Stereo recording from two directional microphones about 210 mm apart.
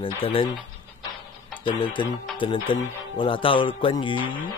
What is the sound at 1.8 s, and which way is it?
Speech, 20° left (ahead or behind).